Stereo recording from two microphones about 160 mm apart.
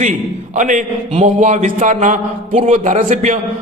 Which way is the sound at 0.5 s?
50° right (ahead or behind).